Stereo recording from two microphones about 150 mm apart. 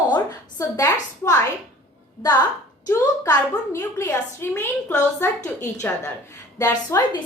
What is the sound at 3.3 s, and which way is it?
A woman's voice, 15° left (ahead or behind).